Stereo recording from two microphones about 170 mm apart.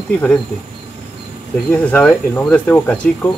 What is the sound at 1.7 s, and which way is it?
Speech, 10° left (ahead or behind).